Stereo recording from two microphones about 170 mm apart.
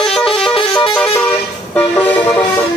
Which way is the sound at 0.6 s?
30° left (ahead or behind).